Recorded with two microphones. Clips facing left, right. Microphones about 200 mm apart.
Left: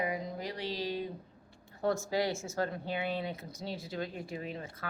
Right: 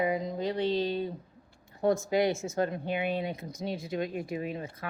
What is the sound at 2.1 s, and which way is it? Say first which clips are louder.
A woman's voice: right 5 dB; 20° right (ahead or behind).